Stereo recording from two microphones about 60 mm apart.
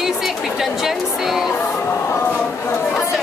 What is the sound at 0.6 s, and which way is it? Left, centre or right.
Speech, centre.